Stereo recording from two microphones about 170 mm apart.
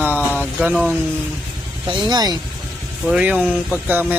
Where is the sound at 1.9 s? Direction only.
25° right (ahead or behind).